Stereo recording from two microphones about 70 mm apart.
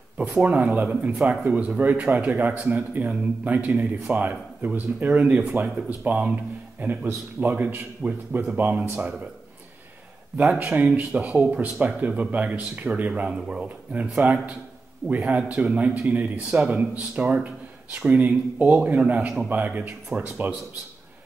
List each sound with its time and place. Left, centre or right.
0.4 s speech: right
10.6 s speech: right